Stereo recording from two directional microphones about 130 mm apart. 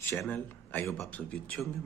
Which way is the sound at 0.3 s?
15° left (ahead or behind).